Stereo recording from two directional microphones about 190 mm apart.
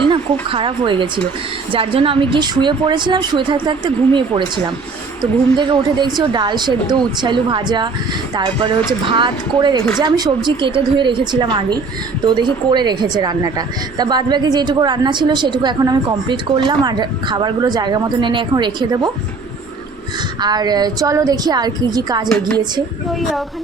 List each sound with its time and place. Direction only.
0.1 s a woman's voice: 25° right (ahead or behind)
8.9 s a woman's voice: 25° right (ahead or behind)
20.4 s a woman's voice: 20° right (ahead or behind)